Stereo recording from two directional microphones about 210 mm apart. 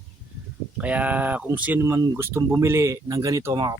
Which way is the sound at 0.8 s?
5° right (ahead or behind).